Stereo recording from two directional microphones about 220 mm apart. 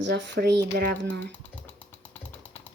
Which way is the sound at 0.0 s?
55° right (ahead or behind).